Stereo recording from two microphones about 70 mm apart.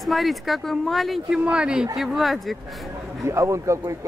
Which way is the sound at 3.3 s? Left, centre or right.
Right.